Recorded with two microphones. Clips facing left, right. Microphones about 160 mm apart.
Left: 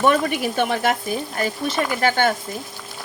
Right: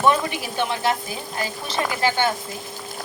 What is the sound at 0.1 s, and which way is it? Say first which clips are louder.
Speech: left 3 dB; 55° left (ahead or behind).